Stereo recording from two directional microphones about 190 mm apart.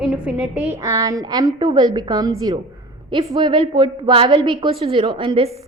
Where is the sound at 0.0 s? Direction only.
5° right (ahead or behind).